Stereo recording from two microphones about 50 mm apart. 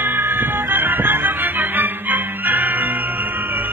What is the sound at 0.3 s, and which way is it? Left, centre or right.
Music, right.